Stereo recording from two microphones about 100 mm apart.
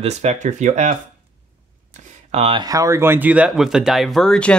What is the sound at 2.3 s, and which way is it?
Speech, 90° right.